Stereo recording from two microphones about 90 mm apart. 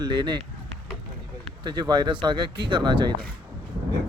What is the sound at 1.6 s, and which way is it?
Speech, 50° right (ahead or behind).